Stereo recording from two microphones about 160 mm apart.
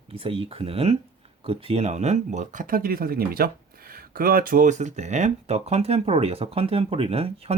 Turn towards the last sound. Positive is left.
turn(degrees=-35)  # may be behind; listen again after turning